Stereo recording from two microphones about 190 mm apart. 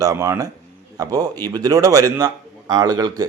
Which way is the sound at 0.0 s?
15° right (ahead or behind).